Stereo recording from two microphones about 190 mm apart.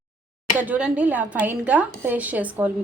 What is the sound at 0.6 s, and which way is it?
Speech, 5° right (ahead or behind).